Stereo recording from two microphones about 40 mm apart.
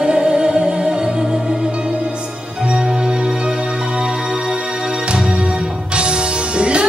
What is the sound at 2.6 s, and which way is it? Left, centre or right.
Music, right.